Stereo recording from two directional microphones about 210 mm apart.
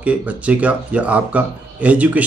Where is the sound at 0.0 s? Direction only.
5° right (ahead or behind).